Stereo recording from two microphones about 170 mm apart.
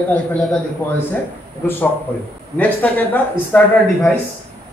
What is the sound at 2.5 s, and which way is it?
A man's voice, 10° left (ahead or behind).